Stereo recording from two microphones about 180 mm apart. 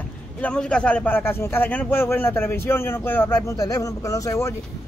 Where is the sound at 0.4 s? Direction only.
5° left (ahead or behind).